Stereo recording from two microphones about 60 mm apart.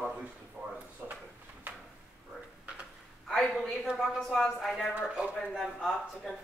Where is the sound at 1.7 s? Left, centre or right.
Right.